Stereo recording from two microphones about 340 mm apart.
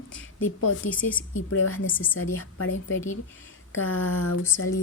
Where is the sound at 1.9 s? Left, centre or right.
Centre.